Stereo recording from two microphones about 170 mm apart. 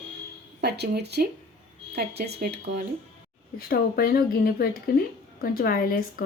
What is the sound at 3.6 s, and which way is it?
Speech, 60° left (ahead or behind).